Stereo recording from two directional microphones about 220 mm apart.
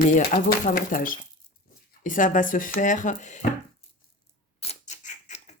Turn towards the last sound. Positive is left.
turn(degrees=30)  # may be behind; listen again after turning